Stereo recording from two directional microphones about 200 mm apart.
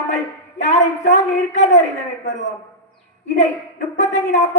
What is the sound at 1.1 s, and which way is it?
A man's voice, 35° left (ahead or behind).